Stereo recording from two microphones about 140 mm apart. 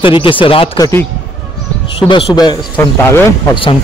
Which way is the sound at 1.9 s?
35° left (ahead or behind).